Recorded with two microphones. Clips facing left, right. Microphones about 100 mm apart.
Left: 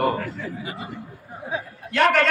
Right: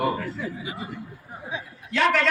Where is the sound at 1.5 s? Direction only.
50° left (ahead or behind).